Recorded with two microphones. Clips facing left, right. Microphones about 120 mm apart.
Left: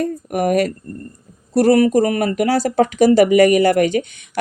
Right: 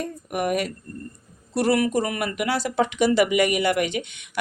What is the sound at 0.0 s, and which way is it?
Speech, 40° left (ahead or behind).